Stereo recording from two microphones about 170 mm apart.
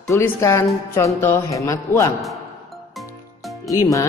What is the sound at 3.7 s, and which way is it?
Speech, 20° left (ahead or behind).